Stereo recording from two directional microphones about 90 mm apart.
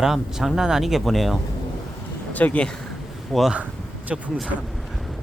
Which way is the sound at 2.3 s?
15° left (ahead or behind).